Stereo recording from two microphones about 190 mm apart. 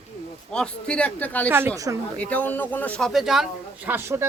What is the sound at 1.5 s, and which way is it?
Speech, 10° right (ahead or behind).